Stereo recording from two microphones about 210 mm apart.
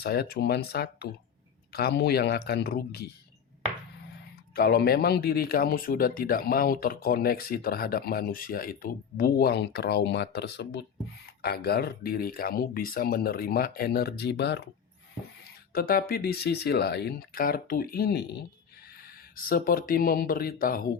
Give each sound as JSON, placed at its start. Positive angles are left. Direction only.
{"t": 0.0, "sound": "speech", "side_deg": 50}
{"t": 4.5, "sound": "speech", "side_deg": 45}
{"t": 15.7, "sound": "speech", "side_deg": 45}
{"t": 19.5, "sound": "speech", "side_deg": 45}